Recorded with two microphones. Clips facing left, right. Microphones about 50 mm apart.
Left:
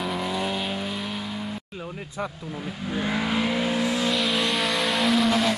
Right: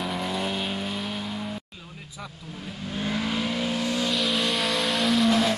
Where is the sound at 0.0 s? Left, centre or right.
Centre.